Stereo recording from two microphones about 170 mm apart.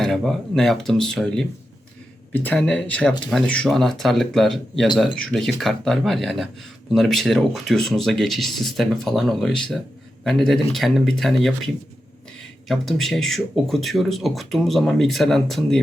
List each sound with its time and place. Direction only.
0.0 s speech: centre (ahead or behind)